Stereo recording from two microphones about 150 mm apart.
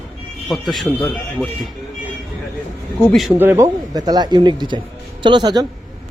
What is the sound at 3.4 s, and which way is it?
A man's voice, 15° right (ahead or behind).